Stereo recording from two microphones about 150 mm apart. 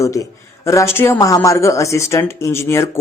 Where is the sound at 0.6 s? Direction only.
20° left (ahead or behind).